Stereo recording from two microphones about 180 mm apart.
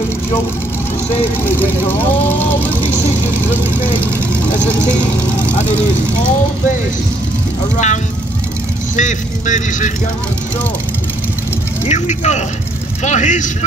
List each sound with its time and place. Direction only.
1.5 s speech: 10° left (ahead or behind)
7.7 s speech: 40° left (ahead or behind)
11.8 s speech: 40° left (ahead or behind)